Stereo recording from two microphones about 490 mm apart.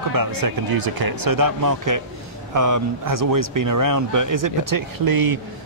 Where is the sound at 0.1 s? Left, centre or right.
Right.